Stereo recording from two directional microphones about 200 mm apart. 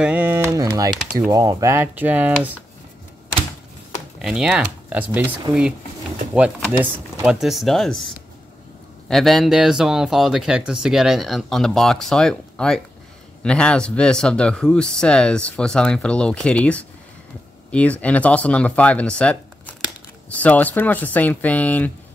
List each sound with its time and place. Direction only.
0.0 s speech: 10° right (ahead or behind)
4.2 s speech: 5° right (ahead or behind)
6.3 s speech: 5° right (ahead or behind)
9.1 s speech: centre (ahead or behind)